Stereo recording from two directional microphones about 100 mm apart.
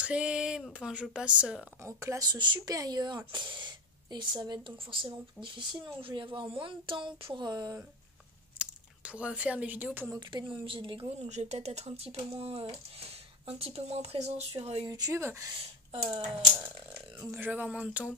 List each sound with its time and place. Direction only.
0.0 s speech: 10° right (ahead or behind)
1.8 s speech: 30° right (ahead or behind)
2.2 s speech: 50° right (ahead or behind)
2.7 s speech: 40° right (ahead or behind)
3.3 s speech: 55° right (ahead or behind)
7.4 s speech: 45° right (ahead or behind)
8.5 s speech: 10° right (ahead or behind)
10.3 s a woman's voice: 60° right (ahead or behind); by 14.4 s 90° right
14.6 s a woman's voice: 80° right
14.9 s speech: 35° right (ahead or behind)
17.4 s speech: 15° right (ahead or behind)